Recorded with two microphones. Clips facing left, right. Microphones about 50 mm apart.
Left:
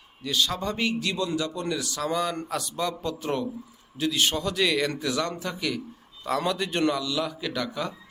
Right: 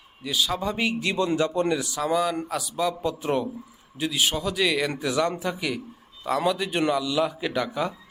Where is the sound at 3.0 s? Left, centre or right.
Centre.